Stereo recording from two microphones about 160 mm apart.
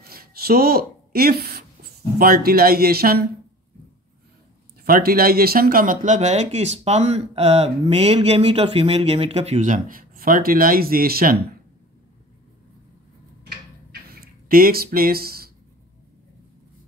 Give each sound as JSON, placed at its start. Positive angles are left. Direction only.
{"t": 0.0, "sound": "a sound", "side_deg": -70}
{"t": 2.1, "sound": "speech", "side_deg": -70}
{"t": 4.8, "sound": "speech", "side_deg": -65}
{"t": 14.2, "sound": "speech", "side_deg": -70}